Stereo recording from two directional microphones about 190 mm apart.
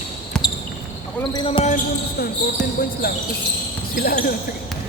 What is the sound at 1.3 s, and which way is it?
Speech, 25° left (ahead or behind).